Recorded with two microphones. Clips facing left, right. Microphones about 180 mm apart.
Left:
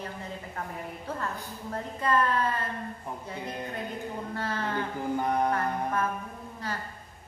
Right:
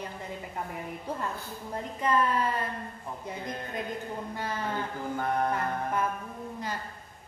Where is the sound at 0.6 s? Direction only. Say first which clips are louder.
Right 1 dB; 15° right (ahead or behind).